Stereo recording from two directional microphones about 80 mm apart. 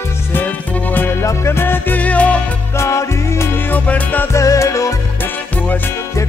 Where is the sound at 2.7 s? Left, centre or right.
Left.